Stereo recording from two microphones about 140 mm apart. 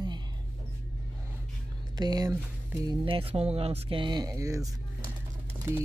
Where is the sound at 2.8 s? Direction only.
40° right (ahead or behind); by 4.7 s 25° right (ahead or behind).